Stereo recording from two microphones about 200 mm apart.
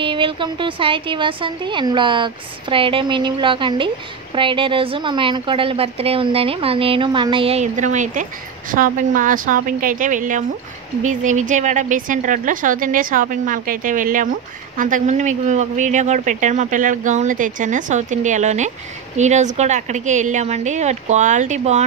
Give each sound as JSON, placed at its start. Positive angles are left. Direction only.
{"t": 0.0, "sound": "a woman's voice", "side_deg": -25}